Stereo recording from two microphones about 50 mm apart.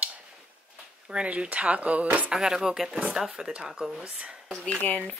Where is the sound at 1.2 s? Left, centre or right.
Right.